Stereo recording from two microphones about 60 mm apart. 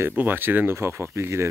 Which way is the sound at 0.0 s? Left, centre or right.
Right.